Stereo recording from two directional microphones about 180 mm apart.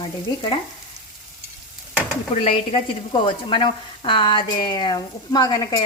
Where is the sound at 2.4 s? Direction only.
30° left (ahead or behind).